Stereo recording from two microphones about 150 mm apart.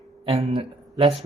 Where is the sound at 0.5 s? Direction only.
40° right (ahead or behind).